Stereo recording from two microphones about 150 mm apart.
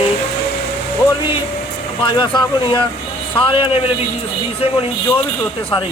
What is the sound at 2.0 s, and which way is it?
Speech, 30° left (ahead or behind).